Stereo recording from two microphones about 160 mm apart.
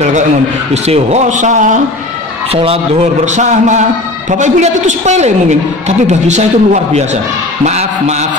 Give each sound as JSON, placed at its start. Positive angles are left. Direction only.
{"t": 0.8, "sound": "a woman's voice", "side_deg": -45}
{"t": 2.5, "sound": "speech", "side_deg": -35}
{"t": 3.3, "sound": "a woman's voice", "side_deg": -50}